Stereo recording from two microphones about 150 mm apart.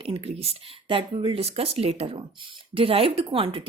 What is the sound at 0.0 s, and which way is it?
Speech, 40° right (ahead or behind).